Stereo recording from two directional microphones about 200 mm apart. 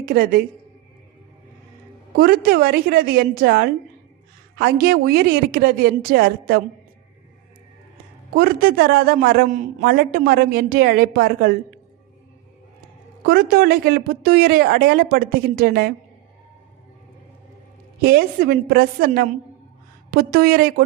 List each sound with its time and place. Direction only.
0.0 s speech: 45° right (ahead or behind)
2.1 s speech: 50° right (ahead or behind)
8.3 s speech: 50° right (ahead or behind)
13.2 s speech: 50° right (ahead or behind)
18.0 s speech: 50° right (ahead or behind)